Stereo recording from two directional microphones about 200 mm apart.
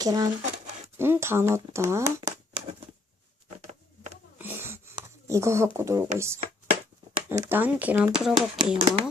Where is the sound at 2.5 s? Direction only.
5° right (ahead or behind).